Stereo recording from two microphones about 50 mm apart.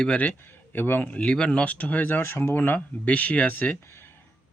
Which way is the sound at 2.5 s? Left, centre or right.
Left.